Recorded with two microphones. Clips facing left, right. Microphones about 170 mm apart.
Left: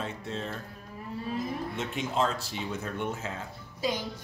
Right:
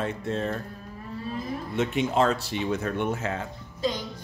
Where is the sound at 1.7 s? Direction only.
70° right (ahead or behind).